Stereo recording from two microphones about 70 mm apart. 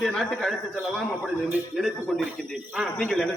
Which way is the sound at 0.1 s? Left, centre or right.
Centre.